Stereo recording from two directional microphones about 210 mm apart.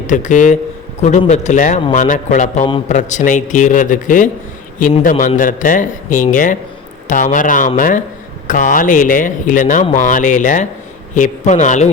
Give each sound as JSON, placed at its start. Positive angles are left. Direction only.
{"t": 0.1, "sound": "speech", "side_deg": 35}